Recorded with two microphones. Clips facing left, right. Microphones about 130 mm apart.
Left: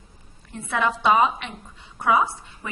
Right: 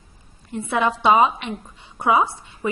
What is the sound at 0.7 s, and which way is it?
A woman's voice, 15° right (ahead or behind).